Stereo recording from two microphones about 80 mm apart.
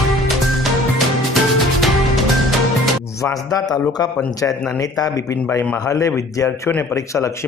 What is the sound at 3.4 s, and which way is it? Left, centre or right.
A man's voice, left.